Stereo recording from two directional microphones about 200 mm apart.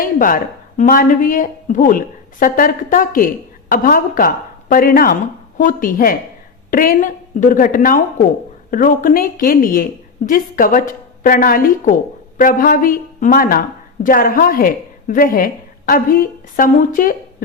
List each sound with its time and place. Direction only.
0.0 s a woman's voice: 45° left (ahead or behind)